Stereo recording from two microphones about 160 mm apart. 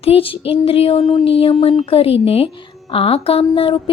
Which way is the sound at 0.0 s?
35° left (ahead or behind).